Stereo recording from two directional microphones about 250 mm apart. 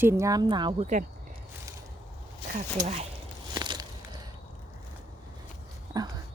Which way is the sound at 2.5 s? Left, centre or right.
Right.